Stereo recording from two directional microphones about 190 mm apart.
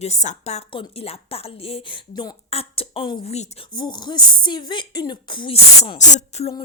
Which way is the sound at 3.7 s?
25° left (ahead or behind).